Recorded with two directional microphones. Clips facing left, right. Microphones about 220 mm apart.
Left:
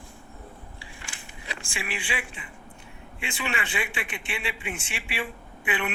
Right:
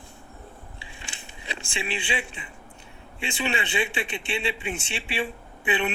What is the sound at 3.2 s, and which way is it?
A man's voice, 25° right (ahead or behind).